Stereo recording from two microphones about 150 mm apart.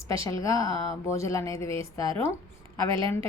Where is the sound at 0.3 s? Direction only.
20° left (ahead or behind).